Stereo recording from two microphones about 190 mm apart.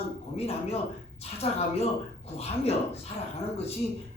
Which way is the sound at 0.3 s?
30° left (ahead or behind).